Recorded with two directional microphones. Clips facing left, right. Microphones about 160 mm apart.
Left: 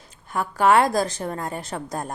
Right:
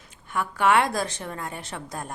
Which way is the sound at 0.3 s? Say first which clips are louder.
Left 3 dB; 35° left (ahead or behind).